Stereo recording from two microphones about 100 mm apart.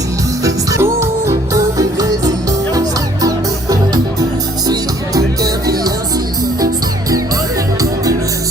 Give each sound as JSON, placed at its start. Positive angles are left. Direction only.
{"t": 0.4, "sound": "music", "side_deg": -30}